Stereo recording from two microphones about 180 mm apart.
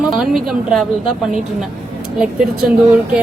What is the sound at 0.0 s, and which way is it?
Speech, centre (ahead or behind).